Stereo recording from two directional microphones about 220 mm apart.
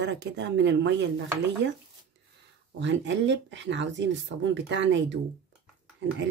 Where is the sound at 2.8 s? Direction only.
55° right (ahead or behind).